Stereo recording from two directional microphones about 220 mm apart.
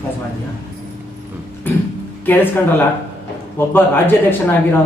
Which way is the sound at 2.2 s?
10° left (ahead or behind).